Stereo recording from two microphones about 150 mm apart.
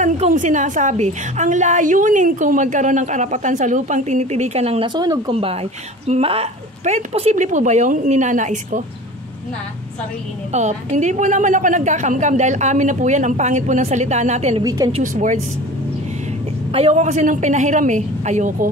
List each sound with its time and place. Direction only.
0.0 s a woman's voice: 55° right (ahead or behind)
4.8 s speech: 25° right (ahead or behind)
5.3 s a woman's voice: 40° right (ahead or behind); by 8.8 s 55° right (ahead or behind)
10.5 s a woman's voice: 50° right (ahead or behind)
14.6 s speech: 25° right (ahead or behind)
14.9 s a woman's voice: 50° right (ahead or behind)
16.7 s a woman's voice: 45° right (ahead or behind)